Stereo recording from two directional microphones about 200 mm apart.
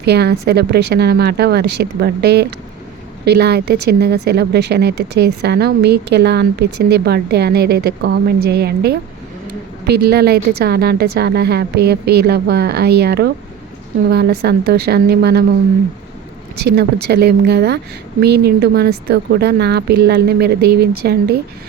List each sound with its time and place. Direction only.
0.0 s a woman's voice: 55° right (ahead or behind)
16.7 s a woman's voice: 55° right (ahead or behind)